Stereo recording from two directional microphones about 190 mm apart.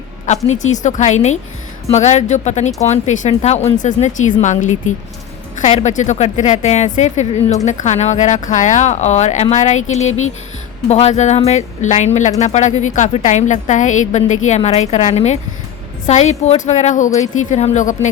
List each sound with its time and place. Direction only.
0.3 s a woman's voice: 40° left (ahead or behind)
10.1 s speech: 90° left
10.8 s a woman's voice: 35° left (ahead or behind)